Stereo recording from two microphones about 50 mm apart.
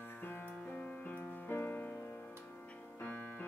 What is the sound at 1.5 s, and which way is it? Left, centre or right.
Music, left.